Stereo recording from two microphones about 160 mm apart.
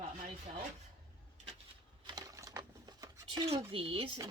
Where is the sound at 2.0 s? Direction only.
20° right (ahead or behind).